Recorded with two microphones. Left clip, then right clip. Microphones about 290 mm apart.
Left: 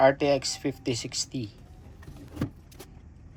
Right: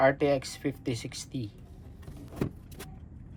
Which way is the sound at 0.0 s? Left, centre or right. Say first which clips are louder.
Left 3 dB; centre.